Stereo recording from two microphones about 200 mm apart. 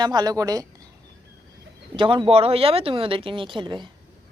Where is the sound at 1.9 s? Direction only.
25° right (ahead or behind).